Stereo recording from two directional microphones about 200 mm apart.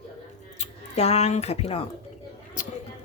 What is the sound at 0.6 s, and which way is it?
Speech, 30° left (ahead or behind).